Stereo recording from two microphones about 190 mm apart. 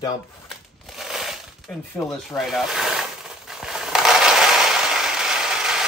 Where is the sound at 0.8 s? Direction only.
Centre (ahead or behind).